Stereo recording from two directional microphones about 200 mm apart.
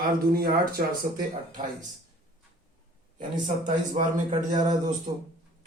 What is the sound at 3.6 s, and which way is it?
Speech, 40° right (ahead or behind).